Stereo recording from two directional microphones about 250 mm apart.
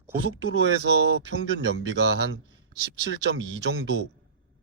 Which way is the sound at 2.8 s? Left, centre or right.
Right.